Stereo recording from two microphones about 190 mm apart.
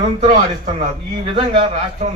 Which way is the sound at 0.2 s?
35° right (ahead or behind).